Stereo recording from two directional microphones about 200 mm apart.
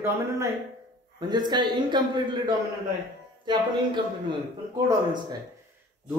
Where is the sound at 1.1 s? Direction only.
20° right (ahead or behind).